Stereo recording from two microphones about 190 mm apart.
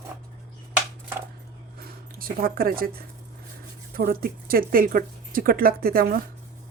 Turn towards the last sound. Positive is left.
turn(degrees=-50)  # may be behind; listen again after turning